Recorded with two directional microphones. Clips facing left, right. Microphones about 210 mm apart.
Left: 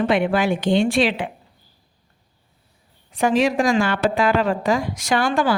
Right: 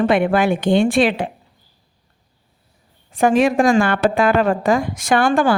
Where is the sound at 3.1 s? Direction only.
50° right (ahead or behind).